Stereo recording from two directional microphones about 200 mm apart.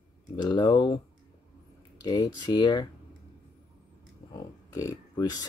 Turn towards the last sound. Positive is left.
turn(degrees=20)  # may be behind; listen again after turning